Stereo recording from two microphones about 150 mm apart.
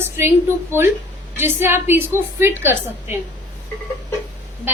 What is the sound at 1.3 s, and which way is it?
A woman's voice, 15° right (ahead or behind).